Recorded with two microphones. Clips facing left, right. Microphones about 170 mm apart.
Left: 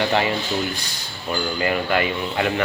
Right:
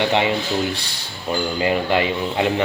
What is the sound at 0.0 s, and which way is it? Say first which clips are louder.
Speech: right 2 dB; 20° right (ahead or behind).